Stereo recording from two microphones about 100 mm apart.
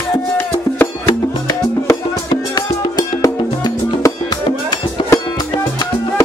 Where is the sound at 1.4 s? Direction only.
35° left (ahead or behind).